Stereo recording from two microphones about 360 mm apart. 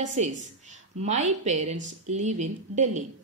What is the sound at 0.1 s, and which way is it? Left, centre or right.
A woman's voice, centre.